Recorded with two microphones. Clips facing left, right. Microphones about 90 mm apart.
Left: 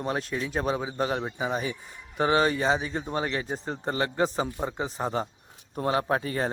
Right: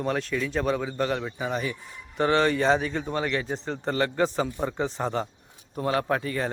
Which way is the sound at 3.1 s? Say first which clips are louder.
Even; 25° left (ahead or behind).